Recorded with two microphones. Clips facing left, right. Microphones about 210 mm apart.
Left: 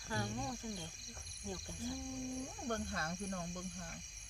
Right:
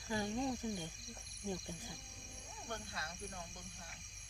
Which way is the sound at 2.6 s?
50° left (ahead or behind).